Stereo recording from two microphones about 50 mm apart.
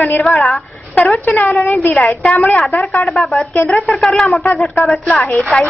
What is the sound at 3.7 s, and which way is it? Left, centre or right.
Speech, centre.